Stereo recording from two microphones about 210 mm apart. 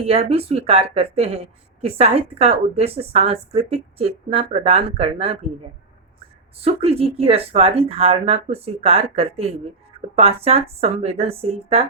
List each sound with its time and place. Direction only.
0.0 s a woman's voice: 30° right (ahead or behind)
6.6 s a woman's voice: 30° right (ahead or behind)